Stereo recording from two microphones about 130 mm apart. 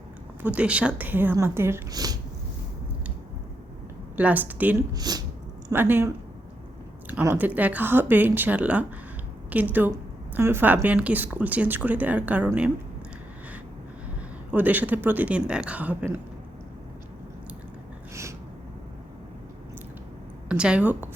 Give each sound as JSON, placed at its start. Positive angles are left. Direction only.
{"t": 0.4, "sound": "speech", "side_deg": -10}
{"t": 1.9, "sound": "speech", "side_deg": -30}
{"t": 4.2, "sound": "speech", "side_deg": -10}
{"t": 4.9, "sound": "speech", "side_deg": -30}
{"t": 5.7, "sound": "speech", "side_deg": -15}
{"t": 7.1, "sound": "speech", "side_deg": -15}
{"t": 14.5, "sound": "speech", "side_deg": -15}
{"t": 18.1, "sound": "a sound", "side_deg": -20}
{"t": 20.5, "sound": "speech", "side_deg": -10}